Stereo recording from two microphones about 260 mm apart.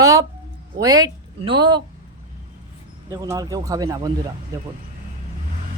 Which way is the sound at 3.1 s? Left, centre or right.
Centre.